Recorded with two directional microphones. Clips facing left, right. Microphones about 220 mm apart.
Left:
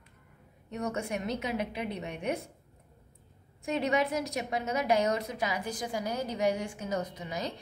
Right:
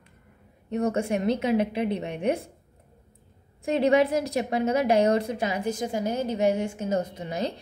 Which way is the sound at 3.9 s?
30° right (ahead or behind).